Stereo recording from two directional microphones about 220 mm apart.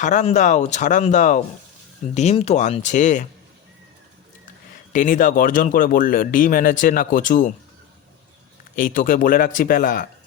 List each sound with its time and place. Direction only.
0.0 s speech: 35° left (ahead or behind)
4.9 s speech: 35° left (ahead or behind)
8.7 s speech: 40° left (ahead or behind)